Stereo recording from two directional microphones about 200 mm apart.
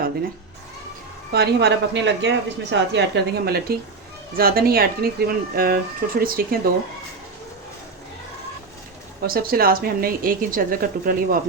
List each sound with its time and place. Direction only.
1.3 s a woman's voice: 55° right (ahead or behind)
9.2 s a woman's voice: 50° right (ahead or behind)